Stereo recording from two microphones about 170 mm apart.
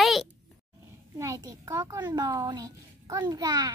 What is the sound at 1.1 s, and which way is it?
A child's voice, 20° right (ahead or behind).